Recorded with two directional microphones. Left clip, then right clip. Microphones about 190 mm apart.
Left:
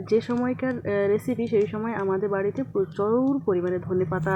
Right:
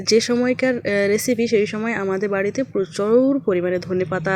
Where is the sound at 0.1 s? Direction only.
20° right (ahead or behind).